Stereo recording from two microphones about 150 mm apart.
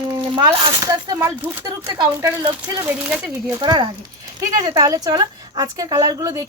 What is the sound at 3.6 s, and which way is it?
Speech, 30° right (ahead or behind).